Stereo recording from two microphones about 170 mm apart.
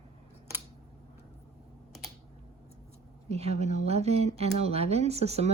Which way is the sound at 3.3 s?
40° right (ahead or behind).